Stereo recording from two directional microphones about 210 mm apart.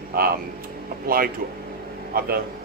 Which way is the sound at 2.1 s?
45° right (ahead or behind).